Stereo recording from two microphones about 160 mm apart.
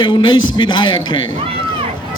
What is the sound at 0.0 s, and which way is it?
A man's voice, 30° left (ahead or behind).